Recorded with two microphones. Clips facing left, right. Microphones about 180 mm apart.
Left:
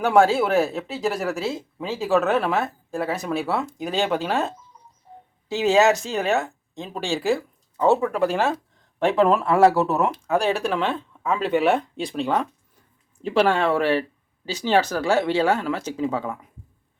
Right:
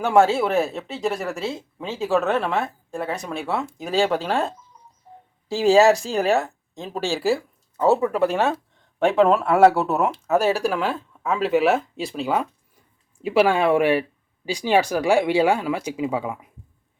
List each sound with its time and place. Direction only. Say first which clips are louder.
0.0 s speech: even; centre (ahead or behind)